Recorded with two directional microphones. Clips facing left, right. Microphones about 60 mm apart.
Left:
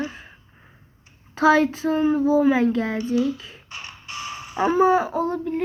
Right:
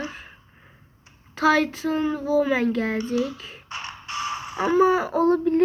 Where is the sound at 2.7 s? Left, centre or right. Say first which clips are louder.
Left 1 dB; right.